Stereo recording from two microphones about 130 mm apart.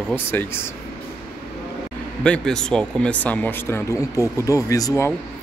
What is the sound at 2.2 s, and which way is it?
Speech, 5° left (ahead or behind).